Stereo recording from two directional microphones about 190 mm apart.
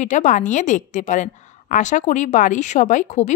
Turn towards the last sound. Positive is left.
turn(degrees=40)  # may be behind; listen again after turning